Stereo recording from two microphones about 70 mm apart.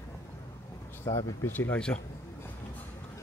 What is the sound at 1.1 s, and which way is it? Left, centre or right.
Speech, left.